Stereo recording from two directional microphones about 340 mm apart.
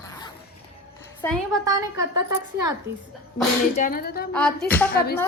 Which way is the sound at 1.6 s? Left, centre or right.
Centre.